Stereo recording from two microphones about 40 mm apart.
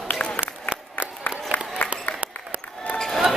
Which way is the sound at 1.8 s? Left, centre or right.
Left.